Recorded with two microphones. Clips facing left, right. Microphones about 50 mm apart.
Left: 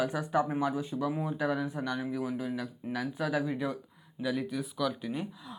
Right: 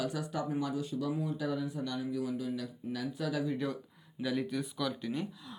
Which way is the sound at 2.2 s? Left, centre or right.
Left.